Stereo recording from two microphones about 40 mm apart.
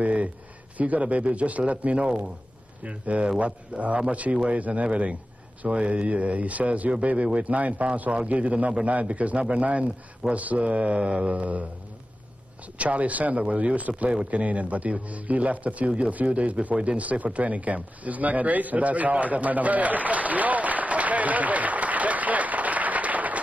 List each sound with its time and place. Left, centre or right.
0.0 s a sound: right
0.7 s a man's voice: right
12.7 s a man's voice: right